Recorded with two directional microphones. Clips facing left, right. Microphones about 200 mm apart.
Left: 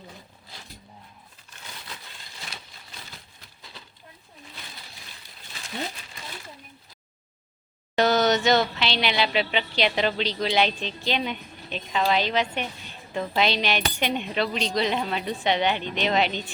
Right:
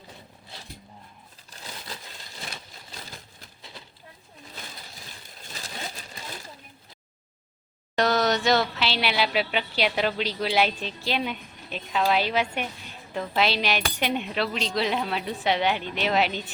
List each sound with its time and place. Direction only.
1.5 s a sound: 35° right (ahead or behind)
7.9 s speech: centre (ahead or behind)
13.1 s cutlery: centre (ahead or behind)